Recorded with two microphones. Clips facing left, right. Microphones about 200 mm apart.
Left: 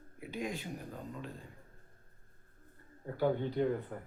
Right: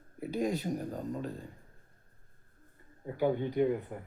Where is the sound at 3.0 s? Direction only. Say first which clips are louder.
Right 2 dB; 15° right (ahead or behind).